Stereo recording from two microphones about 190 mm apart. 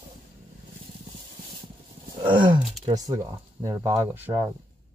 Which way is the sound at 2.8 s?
20° right (ahead or behind).